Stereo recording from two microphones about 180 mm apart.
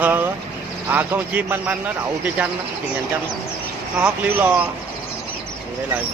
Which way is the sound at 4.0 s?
10° right (ahead or behind).